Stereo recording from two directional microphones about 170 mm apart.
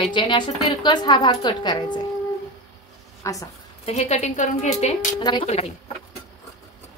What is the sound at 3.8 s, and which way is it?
A woman's voice, 40° left (ahead or behind).